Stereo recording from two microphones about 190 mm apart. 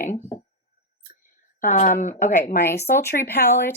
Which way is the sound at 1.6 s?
40° left (ahead or behind).